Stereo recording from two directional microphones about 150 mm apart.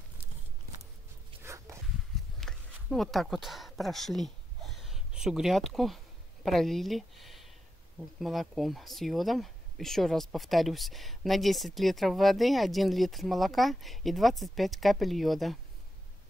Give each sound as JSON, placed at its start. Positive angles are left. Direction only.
{"t": 1.4, "sound": "dog", "side_deg": -20}
{"t": 2.4, "sound": "speech", "side_deg": 0}